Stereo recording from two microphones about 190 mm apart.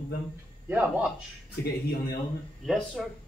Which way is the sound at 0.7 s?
10° right (ahead or behind).